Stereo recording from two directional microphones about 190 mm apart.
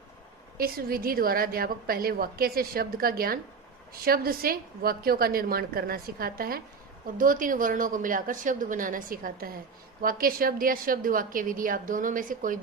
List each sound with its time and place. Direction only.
0.5 s a woman's voice: 50° right (ahead or behind)